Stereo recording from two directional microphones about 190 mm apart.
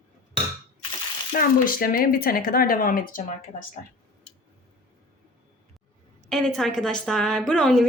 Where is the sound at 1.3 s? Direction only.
50° left (ahead or behind).